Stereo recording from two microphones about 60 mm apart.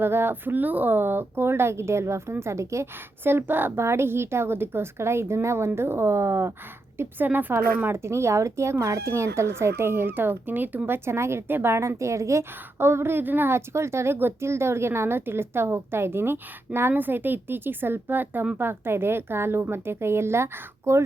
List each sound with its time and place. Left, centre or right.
0.0 s a woman's voice: right
3.2 s a woman's voice: right
7.3 s a woman's voice: right
7.9 s a woman's voice: right
11.8 s a woman's voice: right
13.7 s a woman's voice: right